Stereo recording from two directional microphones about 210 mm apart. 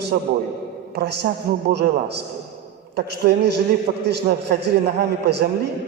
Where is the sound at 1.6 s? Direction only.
50° right (ahead or behind).